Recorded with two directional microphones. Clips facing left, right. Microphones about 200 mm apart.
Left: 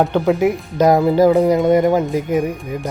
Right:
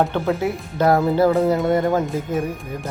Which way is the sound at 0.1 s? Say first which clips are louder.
Left 6 dB; 15° left (ahead or behind).